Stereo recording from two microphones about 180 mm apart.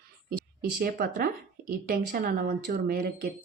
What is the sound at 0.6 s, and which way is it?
Speech, 60° right (ahead or behind).